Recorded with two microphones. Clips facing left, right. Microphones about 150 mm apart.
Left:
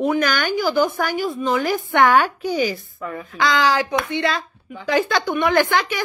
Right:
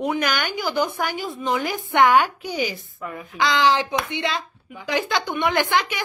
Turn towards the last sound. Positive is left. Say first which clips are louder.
# left 3 dB
turn(degrees=-20)  # may be behind; listen again after turning